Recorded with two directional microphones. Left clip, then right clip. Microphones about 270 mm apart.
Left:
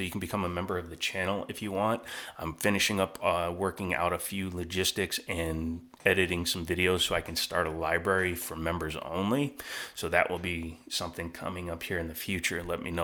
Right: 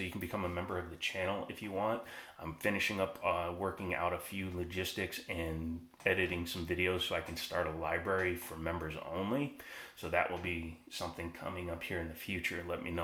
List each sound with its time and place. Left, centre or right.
0.0 s speech: left